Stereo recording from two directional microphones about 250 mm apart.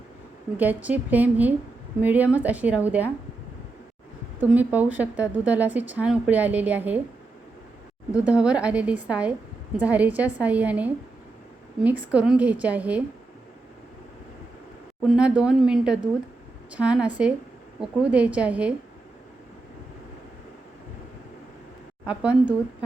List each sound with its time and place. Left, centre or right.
0.5 s a woman's voice: centre
4.4 s a woman's voice: centre
8.1 s a woman's voice: centre
15.0 s a woman's voice: centre
22.0 s a woman's voice: centre